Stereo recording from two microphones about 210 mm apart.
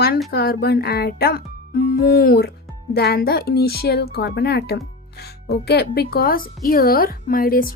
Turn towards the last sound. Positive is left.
turn(degrees=45)  # may be behind; listen again after turning